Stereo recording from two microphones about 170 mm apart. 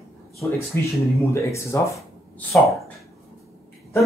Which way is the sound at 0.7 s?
15° left (ahead or behind).